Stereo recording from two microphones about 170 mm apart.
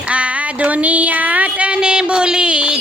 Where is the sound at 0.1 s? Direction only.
5° right (ahead or behind).